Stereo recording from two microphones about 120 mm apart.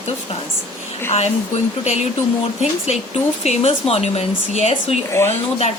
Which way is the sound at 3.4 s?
60° left (ahead or behind).